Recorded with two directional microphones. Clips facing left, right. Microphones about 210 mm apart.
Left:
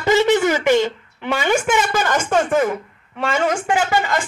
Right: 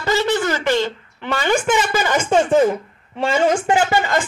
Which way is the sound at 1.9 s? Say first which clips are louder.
Right 1 dB; 5° right (ahead or behind).